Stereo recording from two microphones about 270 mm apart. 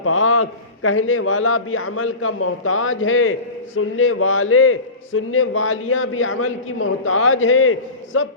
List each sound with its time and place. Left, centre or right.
0.0 s a man's voice: left